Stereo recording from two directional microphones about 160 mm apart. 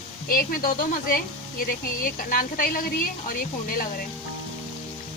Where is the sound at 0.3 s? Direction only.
65° left (ahead or behind).